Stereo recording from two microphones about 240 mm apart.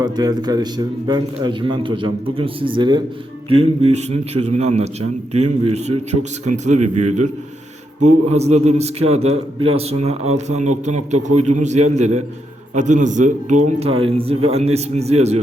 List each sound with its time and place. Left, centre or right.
0.0 s a man's voice: centre